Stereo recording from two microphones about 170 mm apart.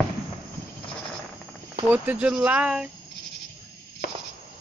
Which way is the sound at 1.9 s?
10° right (ahead or behind).